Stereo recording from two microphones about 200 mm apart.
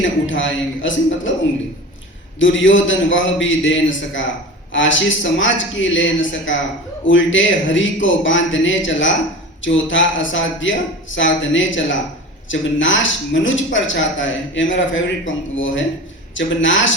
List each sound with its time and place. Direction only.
0.3 s speech: 70° left (ahead or behind)
2.4 s speech: 70° left (ahead or behind)